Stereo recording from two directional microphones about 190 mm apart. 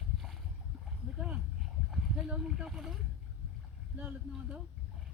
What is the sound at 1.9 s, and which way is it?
Speech, centre (ahead or behind).